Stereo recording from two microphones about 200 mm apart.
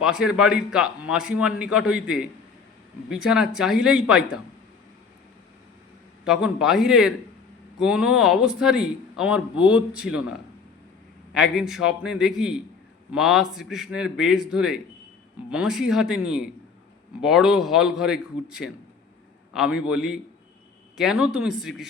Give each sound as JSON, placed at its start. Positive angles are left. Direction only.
{"t": 0.0, "sound": "a man's voice", "side_deg": -5}
{"t": 6.2, "sound": "a man's voice", "side_deg": 0}
{"t": 11.3, "sound": "a man's voice", "side_deg": 0}